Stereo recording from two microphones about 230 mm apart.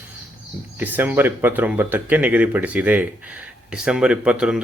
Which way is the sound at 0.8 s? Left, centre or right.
Centre.